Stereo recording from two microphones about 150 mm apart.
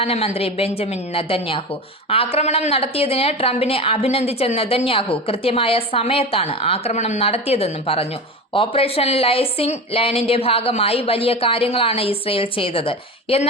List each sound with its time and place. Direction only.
0.0 s speech: 40° left (ahead or behind)